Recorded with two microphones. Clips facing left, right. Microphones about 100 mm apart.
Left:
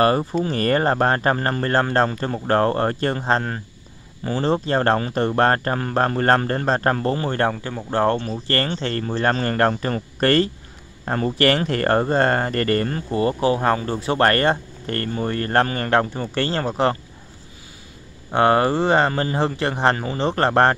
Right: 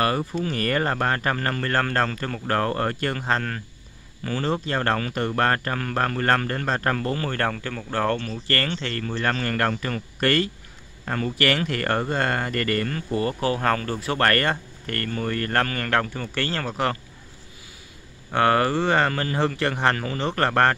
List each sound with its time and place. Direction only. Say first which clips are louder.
0.0 s speech: left 5 dB; 35° left (ahead or behind)
18.3 s speech: left 3 dB; 25° left (ahead or behind)